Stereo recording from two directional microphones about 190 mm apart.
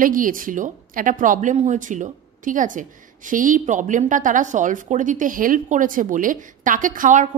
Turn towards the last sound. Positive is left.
turn(degrees=-45)  # may be behind; listen again after turning